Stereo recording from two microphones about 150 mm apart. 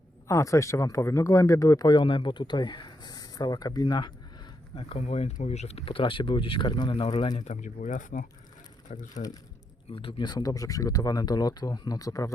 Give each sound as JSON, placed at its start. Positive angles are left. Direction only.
{"t": 0.3, "sound": "speech", "side_deg": 20}
{"t": 4.7, "sound": "speech", "side_deg": 35}
{"t": 7.3, "sound": "speech", "side_deg": 50}
{"t": 9.9, "sound": "speech", "side_deg": 35}